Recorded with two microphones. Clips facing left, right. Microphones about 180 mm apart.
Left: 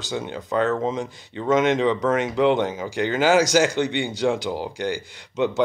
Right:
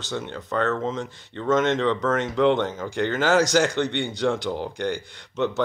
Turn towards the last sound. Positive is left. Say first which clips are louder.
# left 2 dB
turn(degrees=10)  # may be behind; listen again after turning